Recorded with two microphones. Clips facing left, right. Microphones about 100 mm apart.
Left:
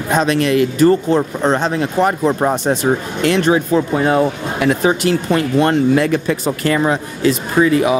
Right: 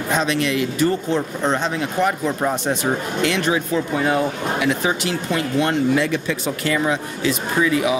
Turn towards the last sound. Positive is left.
turn(degrees=45)  # may be behind; listen again after turning